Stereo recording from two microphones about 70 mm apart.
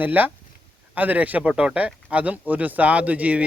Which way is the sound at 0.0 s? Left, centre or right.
Right.